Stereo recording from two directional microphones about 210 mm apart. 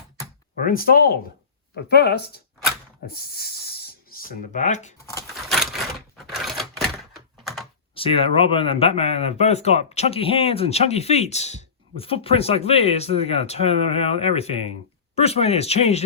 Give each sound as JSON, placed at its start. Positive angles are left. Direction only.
{"t": 0.6, "sound": "speech", "side_deg": 45}
{"t": 5.3, "sound": "typewriter", "side_deg": 0}
{"t": 7.4, "sound": "computer keyboard", "side_deg": 0}
{"t": 7.9, "sound": "speech", "side_deg": 25}